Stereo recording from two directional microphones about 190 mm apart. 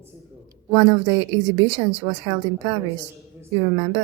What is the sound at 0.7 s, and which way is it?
A woman's voice, 25° right (ahead or behind).